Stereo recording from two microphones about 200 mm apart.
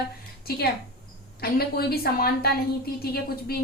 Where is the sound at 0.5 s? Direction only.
50° left (ahead or behind).